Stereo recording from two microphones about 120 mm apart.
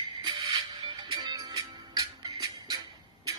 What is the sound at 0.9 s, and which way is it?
Music, 35° right (ahead or behind).